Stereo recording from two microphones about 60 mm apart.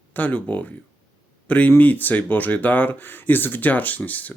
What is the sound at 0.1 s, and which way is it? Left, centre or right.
Speech, left.